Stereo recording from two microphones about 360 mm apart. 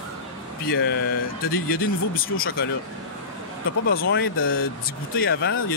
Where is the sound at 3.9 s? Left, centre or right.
Left.